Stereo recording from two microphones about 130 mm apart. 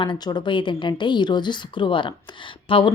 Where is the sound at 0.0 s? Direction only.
35° left (ahead or behind).